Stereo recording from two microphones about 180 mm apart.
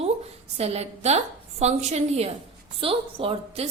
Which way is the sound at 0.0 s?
35° right (ahead or behind).